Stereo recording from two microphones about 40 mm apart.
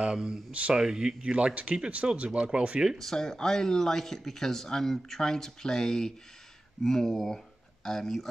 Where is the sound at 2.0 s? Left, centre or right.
Centre.